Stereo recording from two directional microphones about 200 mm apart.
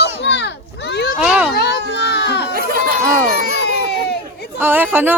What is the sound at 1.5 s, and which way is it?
Children playing, 55° left (ahead or behind).